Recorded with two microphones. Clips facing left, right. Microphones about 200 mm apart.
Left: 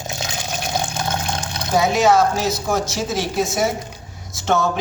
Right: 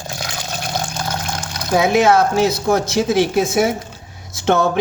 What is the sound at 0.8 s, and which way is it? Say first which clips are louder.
Water: even; 20° left (ahead or behind).